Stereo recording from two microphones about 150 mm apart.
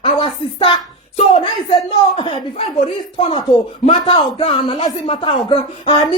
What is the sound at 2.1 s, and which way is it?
Speech, 35° left (ahead or behind).